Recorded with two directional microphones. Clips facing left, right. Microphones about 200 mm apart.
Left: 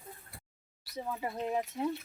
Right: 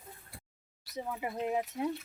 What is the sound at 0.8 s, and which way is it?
Speech, 20° right (ahead or behind).